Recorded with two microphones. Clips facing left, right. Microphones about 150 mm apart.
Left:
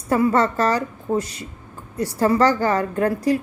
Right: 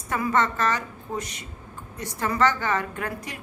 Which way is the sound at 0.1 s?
35° left (ahead or behind).